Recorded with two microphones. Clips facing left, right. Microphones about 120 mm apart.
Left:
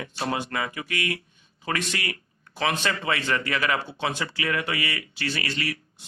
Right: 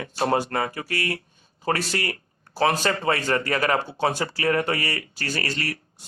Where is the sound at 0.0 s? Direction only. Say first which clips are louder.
Right 6 dB; 40° right (ahead or behind).